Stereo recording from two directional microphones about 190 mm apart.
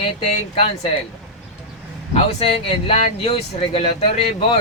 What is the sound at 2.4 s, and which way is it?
Speech, 30° left (ahead or behind).